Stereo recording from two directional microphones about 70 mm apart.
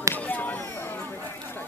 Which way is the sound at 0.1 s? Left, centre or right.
Left.